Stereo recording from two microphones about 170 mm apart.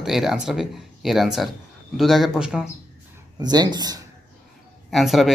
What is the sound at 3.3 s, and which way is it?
Speech, 25° right (ahead or behind).